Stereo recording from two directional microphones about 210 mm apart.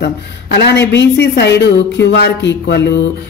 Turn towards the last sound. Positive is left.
turn(degrees=55)  # may be behind; listen again after turning